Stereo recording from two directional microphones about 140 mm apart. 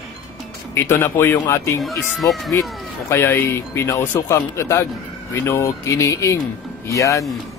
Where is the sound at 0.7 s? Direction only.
15° left (ahead or behind).